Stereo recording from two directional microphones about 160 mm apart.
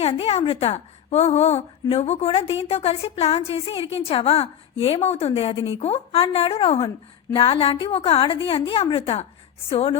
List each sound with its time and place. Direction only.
0.0 s a woman's voice: 40° left (ahead or behind)